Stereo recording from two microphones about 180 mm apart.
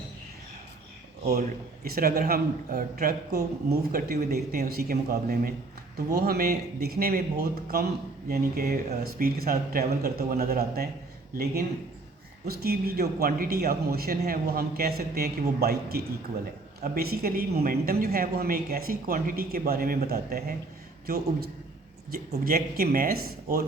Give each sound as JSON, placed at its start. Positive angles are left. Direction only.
{"t": 1.3, "sound": "a man's voice", "side_deg": -55}
{"t": 12.5, "sound": "a man's voice", "side_deg": -60}
{"t": 22.4, "sound": "a man's voice", "side_deg": -55}